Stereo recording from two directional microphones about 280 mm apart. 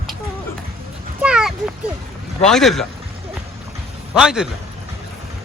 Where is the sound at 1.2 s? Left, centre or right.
Centre.